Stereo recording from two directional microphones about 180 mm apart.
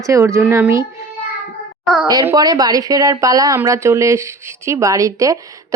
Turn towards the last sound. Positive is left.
turn(degrees=-15)  # may be behind; listen again after turning